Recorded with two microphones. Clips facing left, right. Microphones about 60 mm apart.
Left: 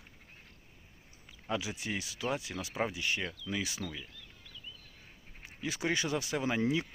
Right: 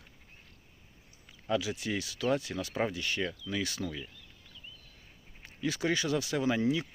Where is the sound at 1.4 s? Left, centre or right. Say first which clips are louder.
Right 4 dB; left.